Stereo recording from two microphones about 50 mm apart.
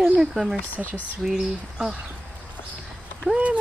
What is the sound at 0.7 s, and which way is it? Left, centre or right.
Speech, left.